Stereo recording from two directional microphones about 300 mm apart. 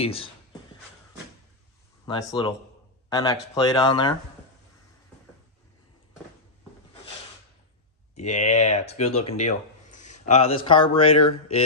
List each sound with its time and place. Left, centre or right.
0.0 s speech: centre
2.0 s speech: centre
8.1 s speech: left